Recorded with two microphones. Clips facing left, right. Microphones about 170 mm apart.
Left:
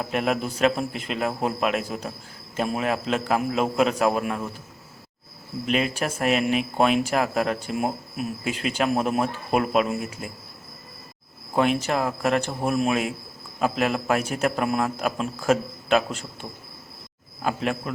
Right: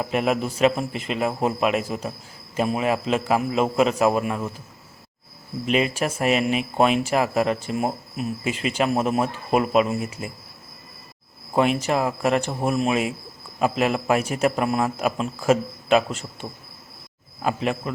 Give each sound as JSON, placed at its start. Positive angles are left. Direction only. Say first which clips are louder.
{"t": 0.0, "sound": "speech", "louder": "right 2 dB", "side_deg": 0}
{"t": 5.6, "sound": "speech", "louder": "right 2 dB", "side_deg": 0}
{"t": 11.5, "sound": "speech", "louder": "right 2 dB", "side_deg": 0}